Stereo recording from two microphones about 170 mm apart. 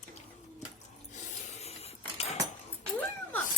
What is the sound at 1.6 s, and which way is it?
Printer, 40° left (ahead or behind).